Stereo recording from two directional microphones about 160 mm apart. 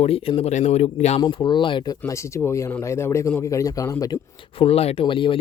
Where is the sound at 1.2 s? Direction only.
30° left (ahead or behind).